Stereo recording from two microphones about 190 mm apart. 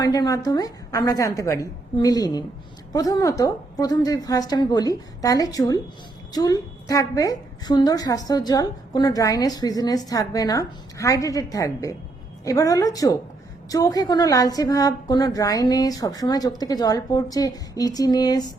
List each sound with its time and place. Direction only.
0.0 s a woman's voice: 20° left (ahead or behind)